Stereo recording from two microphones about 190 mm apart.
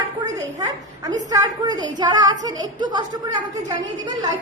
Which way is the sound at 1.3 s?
20° right (ahead or behind).